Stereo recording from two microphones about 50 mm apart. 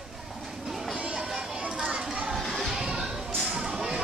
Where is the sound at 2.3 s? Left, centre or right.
Centre.